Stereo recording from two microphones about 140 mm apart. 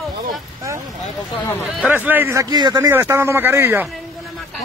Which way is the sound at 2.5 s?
30° right (ahead or behind).